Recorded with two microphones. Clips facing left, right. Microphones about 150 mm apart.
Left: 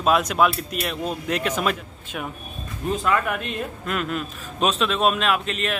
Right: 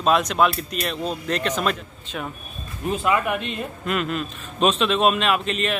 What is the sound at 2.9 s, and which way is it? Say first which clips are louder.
Speech: right 1 dB; 10° right (ahead or behind).